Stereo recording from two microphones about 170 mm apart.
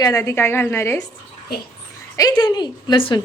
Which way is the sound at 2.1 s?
20° left (ahead or behind).